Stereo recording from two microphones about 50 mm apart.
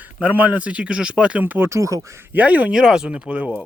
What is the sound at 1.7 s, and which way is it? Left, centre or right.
Speech, right.